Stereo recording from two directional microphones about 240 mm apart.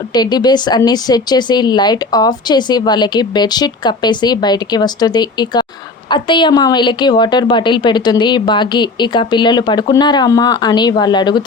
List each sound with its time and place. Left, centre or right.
0.1 s a woman's voice: centre